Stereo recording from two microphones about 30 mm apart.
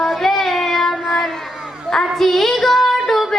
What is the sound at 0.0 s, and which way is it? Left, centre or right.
Child singing, centre.